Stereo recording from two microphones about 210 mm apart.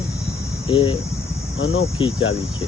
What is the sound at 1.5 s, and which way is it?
Speech, 60° left (ahead or behind).